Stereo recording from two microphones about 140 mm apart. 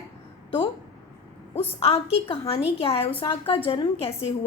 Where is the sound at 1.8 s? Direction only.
45° left (ahead or behind).